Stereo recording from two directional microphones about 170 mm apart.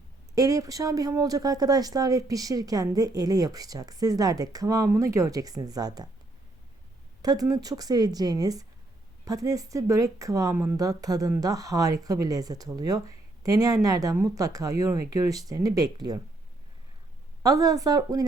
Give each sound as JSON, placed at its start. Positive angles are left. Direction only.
{"t": 0.3, "sound": "speech", "side_deg": -20}
{"t": 7.2, "sound": "speech", "side_deg": -20}
{"t": 17.4, "sound": "speech", "side_deg": -20}